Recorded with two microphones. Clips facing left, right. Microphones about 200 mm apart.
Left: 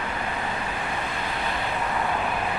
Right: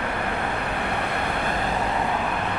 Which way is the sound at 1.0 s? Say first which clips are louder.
Right 4 dB; 65° right (ahead or behind).